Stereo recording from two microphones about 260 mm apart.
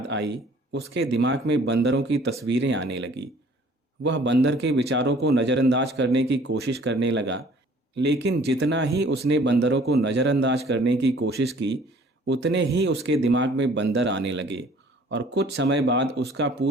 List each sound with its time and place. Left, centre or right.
0.1 s speech: right